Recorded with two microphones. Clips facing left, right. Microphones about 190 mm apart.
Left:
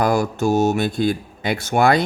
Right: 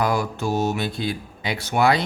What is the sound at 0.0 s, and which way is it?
Speech, 45° left (ahead or behind).